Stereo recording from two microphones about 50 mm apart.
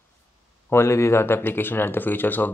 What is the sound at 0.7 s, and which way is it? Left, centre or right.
Speech, left.